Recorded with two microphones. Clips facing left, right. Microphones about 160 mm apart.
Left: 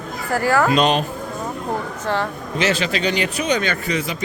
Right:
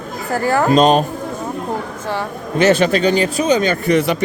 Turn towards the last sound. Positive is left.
turn(degrees=-60)  # may be behind; listen again after turning